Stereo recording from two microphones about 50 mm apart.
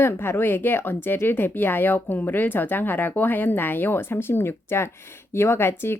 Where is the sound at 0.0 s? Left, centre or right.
Left.